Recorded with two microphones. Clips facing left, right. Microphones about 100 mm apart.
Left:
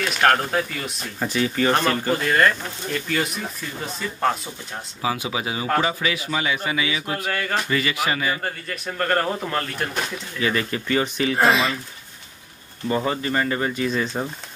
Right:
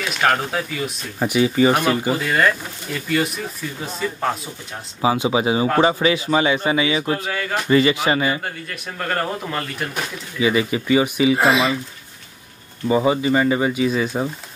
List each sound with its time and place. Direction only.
0.0 s speech: centre (ahead or behind)
1.2 s speech: 15° right (ahead or behind)
5.0 s speech: 25° right (ahead or behind)
7.2 s speech: centre (ahead or behind)
7.7 s speech: 25° right (ahead or behind)
8.4 s speech: centre (ahead or behind)
12.8 s speech: 10° right (ahead or behind)